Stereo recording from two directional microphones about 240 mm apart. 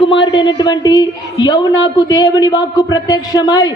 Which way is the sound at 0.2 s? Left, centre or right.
Centre.